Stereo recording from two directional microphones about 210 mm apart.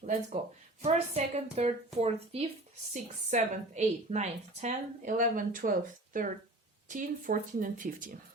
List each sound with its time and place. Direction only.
0.8 s a woman's voice: 35° right (ahead or behind)